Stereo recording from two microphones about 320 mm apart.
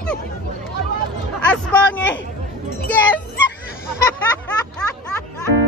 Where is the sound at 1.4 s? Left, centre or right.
Centre.